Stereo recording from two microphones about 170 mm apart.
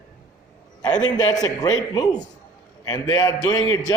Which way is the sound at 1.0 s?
25° left (ahead or behind).